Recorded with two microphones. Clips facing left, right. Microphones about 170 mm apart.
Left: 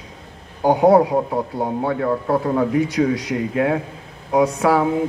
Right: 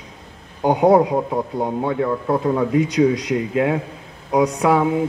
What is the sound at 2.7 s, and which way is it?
Speech, 20° right (ahead or behind).